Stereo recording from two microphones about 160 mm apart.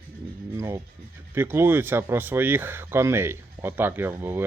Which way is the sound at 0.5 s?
15° right (ahead or behind).